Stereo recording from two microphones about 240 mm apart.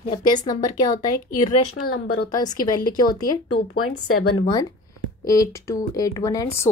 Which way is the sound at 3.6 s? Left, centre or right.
Left.